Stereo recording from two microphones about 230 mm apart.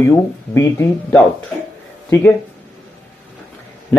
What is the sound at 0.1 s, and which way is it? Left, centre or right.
Speech, centre.